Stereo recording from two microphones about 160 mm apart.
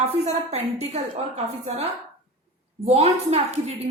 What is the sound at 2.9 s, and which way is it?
Speech, 40° right (ahead or behind).